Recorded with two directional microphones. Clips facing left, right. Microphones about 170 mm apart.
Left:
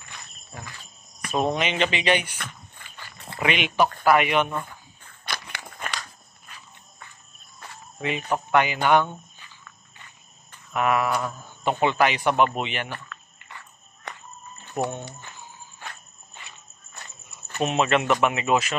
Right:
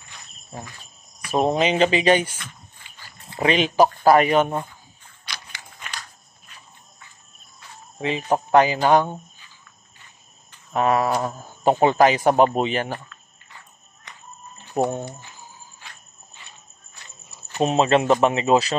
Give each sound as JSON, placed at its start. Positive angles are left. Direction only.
{"t": 1.3, "sound": "speech", "side_deg": -30}
{"t": 2.8, "sound": "dog", "side_deg": 60}
{"t": 3.3, "sound": "speech", "side_deg": -35}
{"t": 5.2, "sound": "a sound", "side_deg": 55}
{"t": 8.0, "sound": "speech", "side_deg": -35}
{"t": 10.7, "sound": "speech", "side_deg": -35}
{"t": 13.5, "sound": "cricket", "side_deg": 65}
{"t": 14.8, "sound": "speech", "side_deg": -35}
{"t": 17.6, "sound": "speech", "side_deg": -30}